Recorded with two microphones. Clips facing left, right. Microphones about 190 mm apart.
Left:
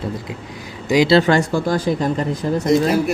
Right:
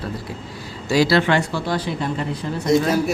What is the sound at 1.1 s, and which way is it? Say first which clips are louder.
Speech: left 4 dB; 40° left (ahead or behind).